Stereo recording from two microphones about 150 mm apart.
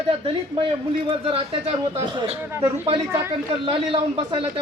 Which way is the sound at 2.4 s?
15° right (ahead or behind).